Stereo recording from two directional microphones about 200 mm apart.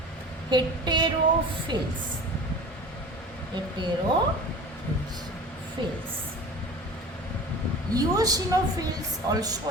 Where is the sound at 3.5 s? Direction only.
20° right (ahead or behind).